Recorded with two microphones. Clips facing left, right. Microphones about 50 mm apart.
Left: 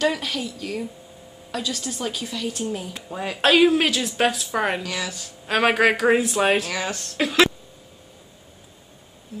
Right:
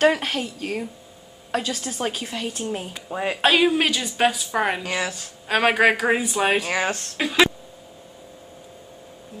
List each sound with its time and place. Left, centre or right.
0.0 s a woman's voice: right
3.1 s speech: right
3.3 s a woman's voice: centre
4.8 s a woman's voice: right
5.5 s a woman's voice: centre
6.7 s a woman's voice: right
7.2 s a woman's voice: centre